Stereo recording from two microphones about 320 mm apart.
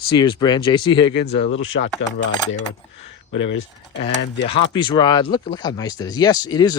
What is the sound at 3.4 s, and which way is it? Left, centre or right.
Speech, left.